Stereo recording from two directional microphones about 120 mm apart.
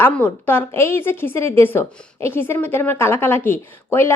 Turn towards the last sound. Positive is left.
turn(degrees=20)  # may be behind; listen again after turning